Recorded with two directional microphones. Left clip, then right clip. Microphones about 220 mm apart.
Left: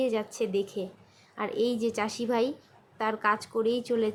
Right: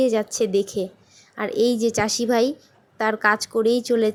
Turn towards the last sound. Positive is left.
turn(degrees=-20)  # may be behind; listen again after turning